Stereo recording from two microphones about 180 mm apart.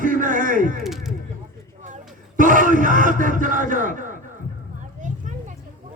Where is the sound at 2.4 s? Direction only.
45° right (ahead or behind).